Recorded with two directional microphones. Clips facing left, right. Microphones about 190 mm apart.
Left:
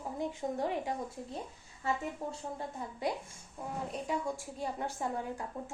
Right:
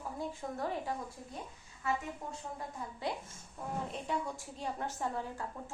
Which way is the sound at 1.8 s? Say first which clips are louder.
Left 2 dB; 30° left (ahead or behind).